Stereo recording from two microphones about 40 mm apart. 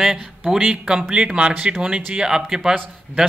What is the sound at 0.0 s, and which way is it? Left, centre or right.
Speech, centre.